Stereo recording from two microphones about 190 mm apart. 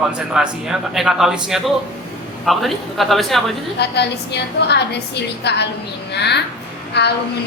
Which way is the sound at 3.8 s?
60° left (ahead or behind).